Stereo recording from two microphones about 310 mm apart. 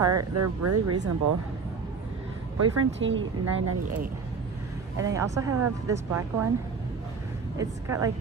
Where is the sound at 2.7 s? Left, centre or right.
Right.